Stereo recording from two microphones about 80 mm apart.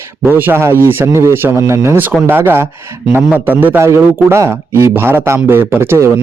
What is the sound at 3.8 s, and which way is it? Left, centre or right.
A man's voice, right.